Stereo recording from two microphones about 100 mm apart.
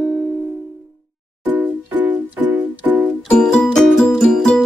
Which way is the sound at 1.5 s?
15° right (ahead or behind).